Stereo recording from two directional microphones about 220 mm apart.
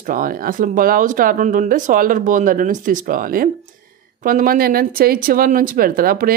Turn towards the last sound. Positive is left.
turn(degrees=-40)  # may be behind; listen again after turning